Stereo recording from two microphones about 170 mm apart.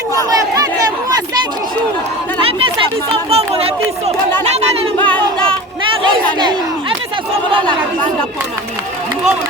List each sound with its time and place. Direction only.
0.1 s crowd: 20° right (ahead or behind)
2.4 s chatter: 35° right (ahead or behind)
3.2 s a sound: 35° right (ahead or behind)